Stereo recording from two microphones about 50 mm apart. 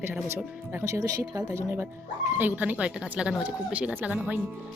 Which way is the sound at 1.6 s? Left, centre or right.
Right.